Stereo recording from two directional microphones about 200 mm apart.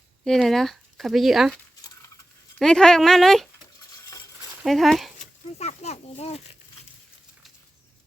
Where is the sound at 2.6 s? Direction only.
5° left (ahead or behind).